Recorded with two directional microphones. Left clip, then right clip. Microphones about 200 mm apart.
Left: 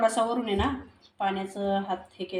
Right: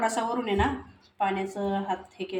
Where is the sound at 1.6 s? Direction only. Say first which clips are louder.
Left 2 dB; 20° right (ahead or behind).